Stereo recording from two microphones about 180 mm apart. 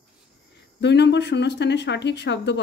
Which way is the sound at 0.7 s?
70° left (ahead or behind).